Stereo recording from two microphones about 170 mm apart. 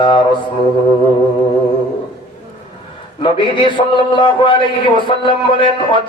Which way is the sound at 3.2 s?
30° left (ahead or behind).